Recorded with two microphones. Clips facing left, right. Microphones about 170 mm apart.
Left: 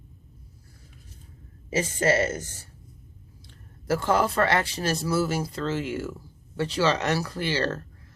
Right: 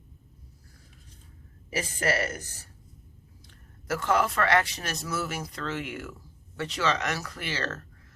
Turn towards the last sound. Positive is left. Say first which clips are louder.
# left 7 dB
turn(degrees=30)  # may be behind; listen again after turning